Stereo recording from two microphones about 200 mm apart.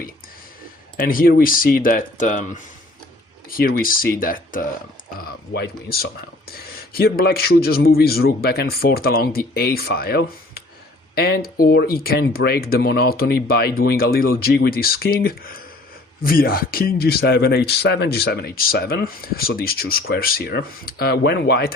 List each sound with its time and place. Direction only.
0.9 s speech: 45° left (ahead or behind)
3.6 s speech: 45° left (ahead or behind)